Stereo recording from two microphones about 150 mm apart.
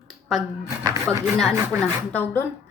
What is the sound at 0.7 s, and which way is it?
Speech, 20° right (ahead or behind).